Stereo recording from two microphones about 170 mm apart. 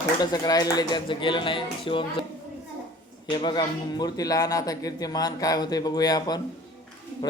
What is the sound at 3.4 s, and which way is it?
Speech, 25° left (ahead or behind).